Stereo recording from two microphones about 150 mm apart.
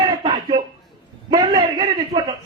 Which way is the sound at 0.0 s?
30° right (ahead or behind).